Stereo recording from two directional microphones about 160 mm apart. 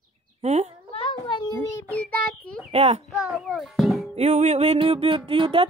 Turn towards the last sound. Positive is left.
turn(degrees=-35)  # may be behind; listen again after turning